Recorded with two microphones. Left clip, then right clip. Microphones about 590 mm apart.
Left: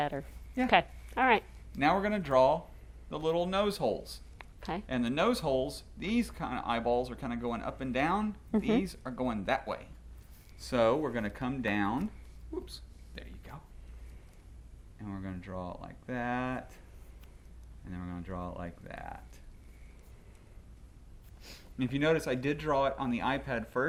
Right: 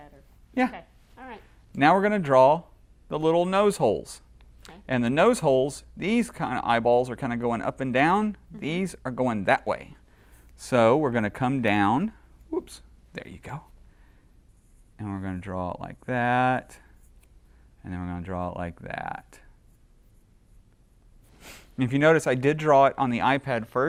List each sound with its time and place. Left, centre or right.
0.7 s a woman's voice: left
1.8 s speech: right
10.6 s speech: right
13.1 s speech: right
14.9 s speech: right
17.8 s speech: right
21.4 s speech: right